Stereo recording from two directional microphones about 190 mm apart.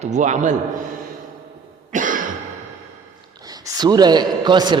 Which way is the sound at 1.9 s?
45° right (ahead or behind).